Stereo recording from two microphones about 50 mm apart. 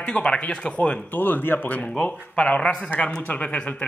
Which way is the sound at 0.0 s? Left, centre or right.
Left.